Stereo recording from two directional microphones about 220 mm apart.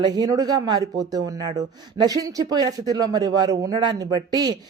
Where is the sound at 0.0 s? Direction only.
20° right (ahead or behind).